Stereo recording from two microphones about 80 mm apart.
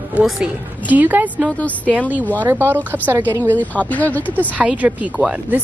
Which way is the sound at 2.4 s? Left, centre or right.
Right.